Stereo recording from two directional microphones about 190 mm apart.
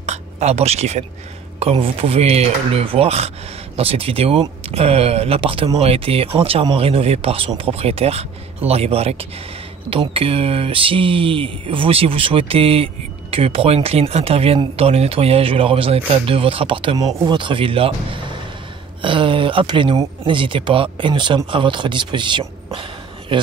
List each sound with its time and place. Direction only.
0.0 s a sound: 35° right (ahead or behind)
1.6 s speech: 30° right (ahead or behind)
18.9 s speech: 25° right (ahead or behind)